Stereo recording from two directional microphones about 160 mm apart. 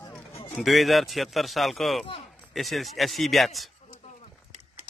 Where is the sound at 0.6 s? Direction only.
Centre (ahead or behind).